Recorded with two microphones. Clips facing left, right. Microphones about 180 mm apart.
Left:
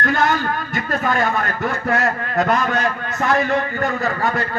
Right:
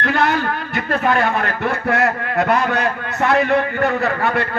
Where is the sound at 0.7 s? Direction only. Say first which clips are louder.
Right 4 dB; 60° right (ahead or behind).